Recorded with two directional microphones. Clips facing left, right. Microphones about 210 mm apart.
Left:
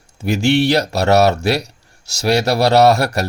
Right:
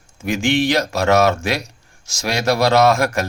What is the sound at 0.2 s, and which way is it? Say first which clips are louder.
Speech: left 3 dB; 35° left (ahead or behind).